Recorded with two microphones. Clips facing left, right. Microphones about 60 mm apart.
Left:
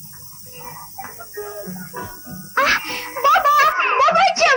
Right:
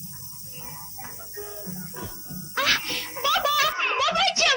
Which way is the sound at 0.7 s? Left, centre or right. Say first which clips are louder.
Left 8 dB; left.